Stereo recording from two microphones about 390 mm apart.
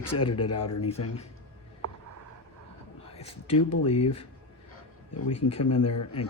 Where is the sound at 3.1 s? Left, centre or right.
Centre.